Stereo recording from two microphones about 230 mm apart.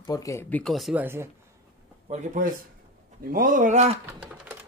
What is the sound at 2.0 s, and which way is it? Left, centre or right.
Speech, right.